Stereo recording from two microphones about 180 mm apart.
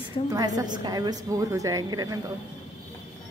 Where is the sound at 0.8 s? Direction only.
25° right (ahead or behind).